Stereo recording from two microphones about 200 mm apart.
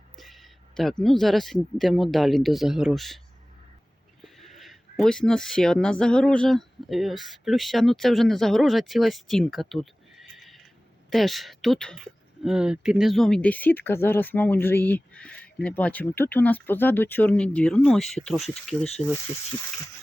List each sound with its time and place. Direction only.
0.2 s speech: centre (ahead or behind)
4.2 s speech: centre (ahead or behind)